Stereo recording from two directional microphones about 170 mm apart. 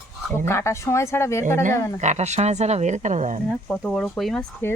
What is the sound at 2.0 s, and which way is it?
Speech, 40° right (ahead or behind).